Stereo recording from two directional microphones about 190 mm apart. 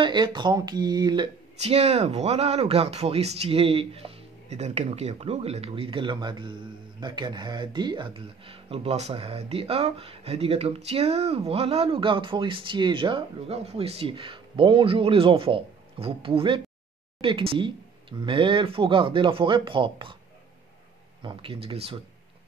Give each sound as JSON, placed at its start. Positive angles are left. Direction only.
{"t": 0.0, "sound": "speech", "side_deg": -25}
{"t": 21.2, "sound": "speech", "side_deg": -25}